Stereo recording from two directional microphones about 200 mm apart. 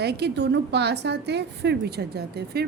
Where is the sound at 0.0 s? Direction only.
55° right (ahead or behind).